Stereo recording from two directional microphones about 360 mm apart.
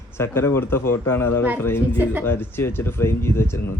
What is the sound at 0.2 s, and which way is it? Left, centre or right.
A man's voice, centre.